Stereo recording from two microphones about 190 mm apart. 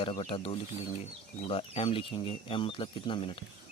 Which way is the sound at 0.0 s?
30° left (ahead or behind).